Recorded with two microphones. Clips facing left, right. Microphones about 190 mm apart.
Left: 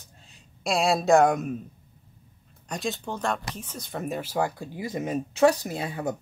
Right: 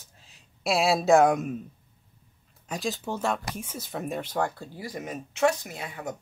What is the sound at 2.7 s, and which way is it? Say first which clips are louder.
Speech: even; centre (ahead or behind).